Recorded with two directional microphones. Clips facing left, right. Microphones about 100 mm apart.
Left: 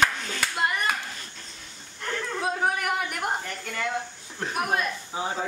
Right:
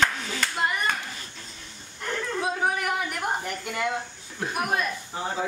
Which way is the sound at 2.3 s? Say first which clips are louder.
Even; centre (ahead or behind).